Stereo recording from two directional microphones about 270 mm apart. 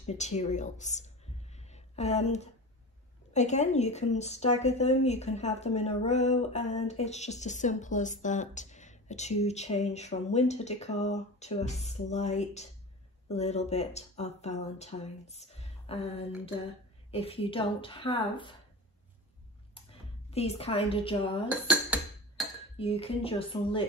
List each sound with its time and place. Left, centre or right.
0.0 s speech: left
19.7 s a sound: left
21.5 s dishes: centre
22.8 s speech: left